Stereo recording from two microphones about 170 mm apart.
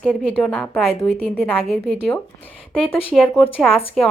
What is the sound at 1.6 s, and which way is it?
A woman's voice, centre (ahead or behind).